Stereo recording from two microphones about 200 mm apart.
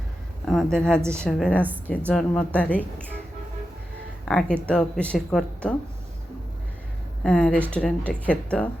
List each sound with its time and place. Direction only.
0.4 s a woman's voice: centre (ahead or behind)
4.3 s speech: 5° left (ahead or behind)
7.3 s speech: 5° left (ahead or behind)